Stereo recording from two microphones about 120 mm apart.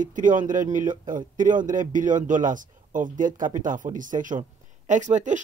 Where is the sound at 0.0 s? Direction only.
90° right.